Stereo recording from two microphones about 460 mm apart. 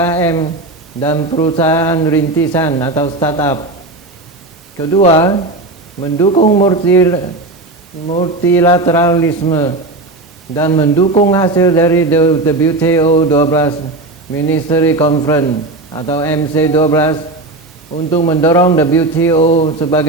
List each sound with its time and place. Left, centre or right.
0.0 s a man's voice: centre
4.8 s a man's voice: centre